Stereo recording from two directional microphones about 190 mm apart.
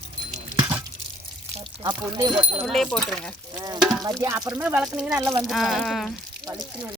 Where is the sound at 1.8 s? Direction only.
20° right (ahead or behind).